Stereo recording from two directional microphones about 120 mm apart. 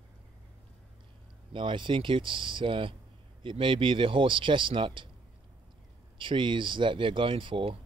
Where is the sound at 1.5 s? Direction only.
45° right (ahead or behind).